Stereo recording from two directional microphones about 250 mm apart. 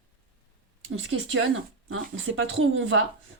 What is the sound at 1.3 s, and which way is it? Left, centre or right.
Speech, right.